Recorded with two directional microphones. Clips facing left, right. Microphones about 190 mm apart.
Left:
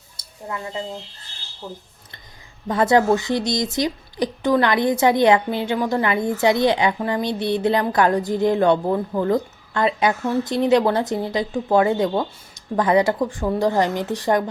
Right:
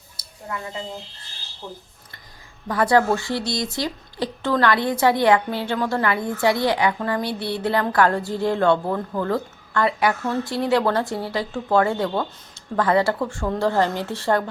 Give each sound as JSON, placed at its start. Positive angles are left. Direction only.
{"t": 0.2, "sound": "a sound", "side_deg": 25}
{"t": 1.6, "sound": "speech", "side_deg": 5}
{"t": 2.6, "sound": "speech", "side_deg": 20}